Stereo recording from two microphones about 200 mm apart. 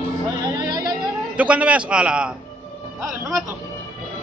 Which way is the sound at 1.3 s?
5° right (ahead or behind).